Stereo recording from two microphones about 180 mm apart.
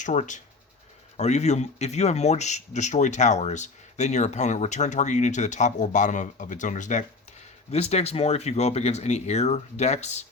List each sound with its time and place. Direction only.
0.0 s speech: 40° left (ahead or behind)